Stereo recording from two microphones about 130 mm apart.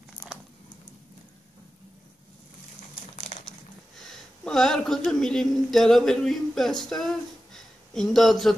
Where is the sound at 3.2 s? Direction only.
50° left (ahead or behind).